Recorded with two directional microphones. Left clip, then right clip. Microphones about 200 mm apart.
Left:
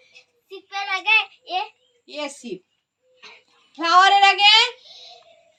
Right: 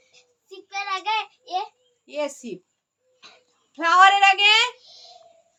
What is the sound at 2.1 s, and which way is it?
Speech, 55° right (ahead or behind).